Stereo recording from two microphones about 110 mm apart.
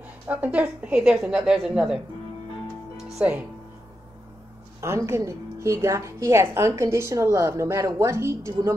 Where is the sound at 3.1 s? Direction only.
10° right (ahead or behind).